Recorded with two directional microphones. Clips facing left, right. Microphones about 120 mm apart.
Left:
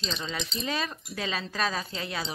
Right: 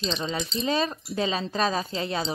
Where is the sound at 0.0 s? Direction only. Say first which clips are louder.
Right 5 dB; 20° right (ahead or behind).